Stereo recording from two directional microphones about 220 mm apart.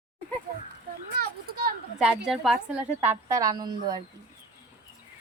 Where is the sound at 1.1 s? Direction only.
45° right (ahead or behind).